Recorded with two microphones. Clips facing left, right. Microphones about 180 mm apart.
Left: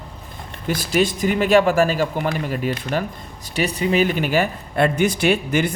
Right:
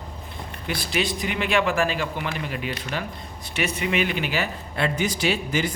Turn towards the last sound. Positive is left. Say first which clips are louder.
# left 5 dB
turn(degrees=55)  # may be behind; listen again after turning